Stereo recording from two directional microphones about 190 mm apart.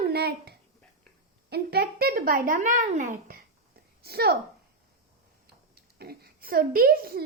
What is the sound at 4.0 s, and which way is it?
Speech, 55° right (ahead or behind).